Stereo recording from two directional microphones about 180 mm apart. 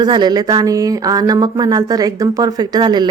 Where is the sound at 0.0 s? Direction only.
25° right (ahead or behind).